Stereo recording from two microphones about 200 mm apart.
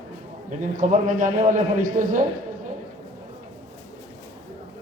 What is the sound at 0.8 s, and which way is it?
A man's voice, 40° right (ahead or behind).